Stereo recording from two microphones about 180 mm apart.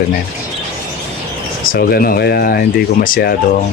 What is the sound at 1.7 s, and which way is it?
Speech, 55° left (ahead or behind).